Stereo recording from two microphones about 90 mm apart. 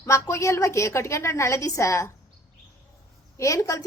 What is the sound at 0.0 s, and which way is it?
A woman's voice, 35° left (ahead or behind).